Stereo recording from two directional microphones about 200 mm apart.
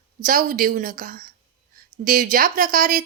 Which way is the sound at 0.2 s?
45° right (ahead or behind).